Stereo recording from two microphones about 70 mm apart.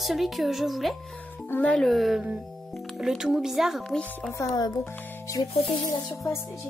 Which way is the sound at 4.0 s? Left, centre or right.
Centre.